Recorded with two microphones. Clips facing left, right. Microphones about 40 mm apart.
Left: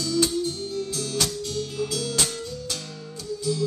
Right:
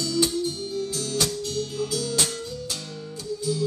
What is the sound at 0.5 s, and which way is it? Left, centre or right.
Music, centre.